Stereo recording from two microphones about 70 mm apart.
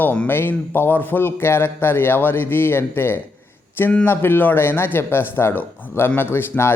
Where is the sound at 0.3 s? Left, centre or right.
Left.